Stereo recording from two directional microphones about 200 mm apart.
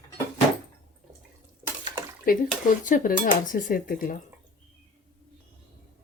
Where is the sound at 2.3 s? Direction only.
45° left (ahead or behind).